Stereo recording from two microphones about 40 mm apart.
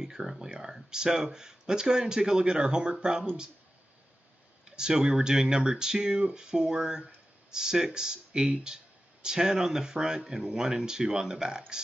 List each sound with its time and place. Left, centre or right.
0.0 s a sound: centre
0.6 s speech: centre
4.6 s speech: centre